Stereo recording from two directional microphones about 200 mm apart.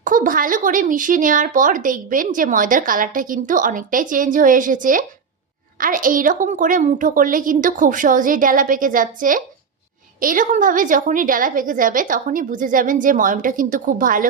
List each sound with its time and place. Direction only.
0.0 s a woman's voice: 40° right (ahead or behind)